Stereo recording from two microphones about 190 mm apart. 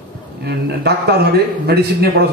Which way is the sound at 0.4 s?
60° right (ahead or behind).